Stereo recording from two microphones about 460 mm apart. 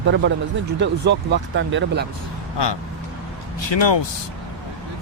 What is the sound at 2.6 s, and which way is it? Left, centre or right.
Speech, left.